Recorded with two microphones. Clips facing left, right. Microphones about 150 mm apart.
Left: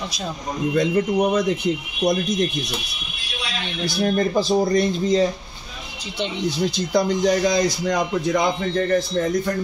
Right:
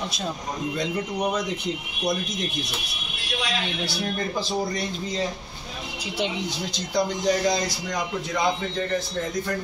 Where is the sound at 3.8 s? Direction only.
40° left (ahead or behind).